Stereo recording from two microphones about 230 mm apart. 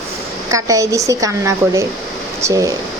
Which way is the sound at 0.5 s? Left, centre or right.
Centre.